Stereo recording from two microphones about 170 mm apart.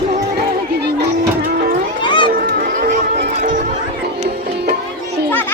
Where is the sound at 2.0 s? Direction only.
30° left (ahead or behind).